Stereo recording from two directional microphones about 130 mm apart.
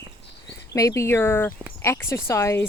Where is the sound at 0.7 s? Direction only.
25° left (ahead or behind).